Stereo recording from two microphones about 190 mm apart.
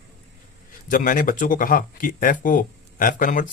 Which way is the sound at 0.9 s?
45° left (ahead or behind).